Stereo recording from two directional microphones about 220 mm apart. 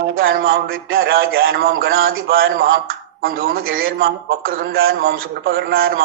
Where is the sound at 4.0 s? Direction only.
40° right (ahead or behind).